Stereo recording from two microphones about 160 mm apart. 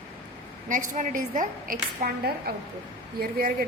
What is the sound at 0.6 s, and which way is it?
A woman's voice, 50° right (ahead or behind).